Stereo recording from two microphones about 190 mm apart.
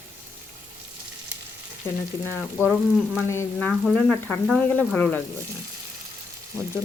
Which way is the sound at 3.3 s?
10° left (ahead or behind).